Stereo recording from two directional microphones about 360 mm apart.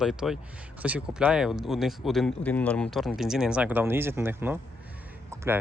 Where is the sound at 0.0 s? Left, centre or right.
Centre.